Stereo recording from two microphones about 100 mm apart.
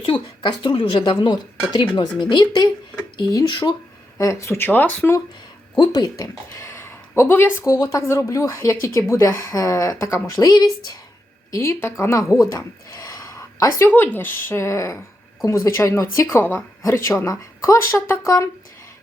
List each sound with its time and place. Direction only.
0.0 s speech: 55° left (ahead or behind)
4.2 s speech: 30° left (ahead or behind)
5.7 s speech: 45° left (ahead or behind); by 7.7 s 25° left (ahead or behind)
7.7 s speech: 35° left (ahead or behind)
11.5 s speech: 25° left (ahead or behind)